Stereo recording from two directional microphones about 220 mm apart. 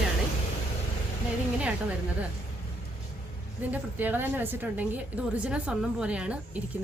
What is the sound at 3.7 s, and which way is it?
A woman's voice, 10° right (ahead or behind).